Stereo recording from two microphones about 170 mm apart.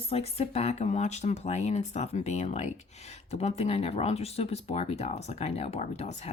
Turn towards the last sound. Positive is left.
turn(degrees=40)  # may be behind; listen again after turning